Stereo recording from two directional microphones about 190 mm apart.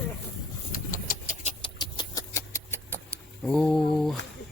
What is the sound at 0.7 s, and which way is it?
Engine, 45° left (ahead or behind).